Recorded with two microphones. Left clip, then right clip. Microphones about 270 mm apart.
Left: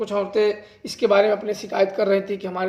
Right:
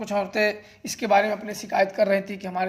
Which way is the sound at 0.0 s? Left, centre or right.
Right.